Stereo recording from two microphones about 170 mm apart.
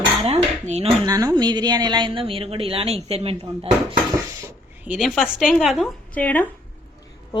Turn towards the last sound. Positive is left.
turn(degrees=10)  # may be behind; listen again after turning